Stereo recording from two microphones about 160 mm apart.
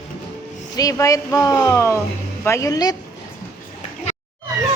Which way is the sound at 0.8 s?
20° left (ahead or behind).